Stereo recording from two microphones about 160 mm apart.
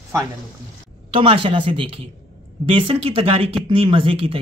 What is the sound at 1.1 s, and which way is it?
Speech, 35° right (ahead or behind).